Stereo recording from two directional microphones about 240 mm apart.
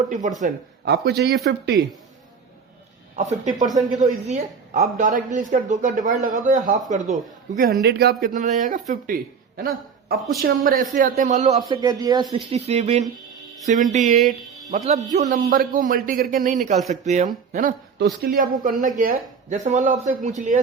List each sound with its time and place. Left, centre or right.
0.1 s speech: right
0.4 s speech: right
3.2 s speech: right
11.7 s speech: centre